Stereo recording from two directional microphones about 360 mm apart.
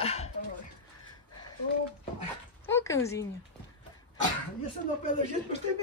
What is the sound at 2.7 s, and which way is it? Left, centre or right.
Speech, centre.